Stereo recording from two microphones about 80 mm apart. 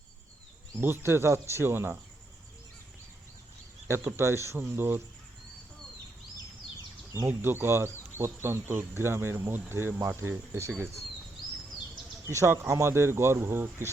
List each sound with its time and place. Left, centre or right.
0.8 s speech: right
3.8 s speech: right
7.3 s speech: right
12.3 s speech: right